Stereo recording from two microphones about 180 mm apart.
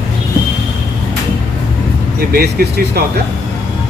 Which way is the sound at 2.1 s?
60° right (ahead or behind).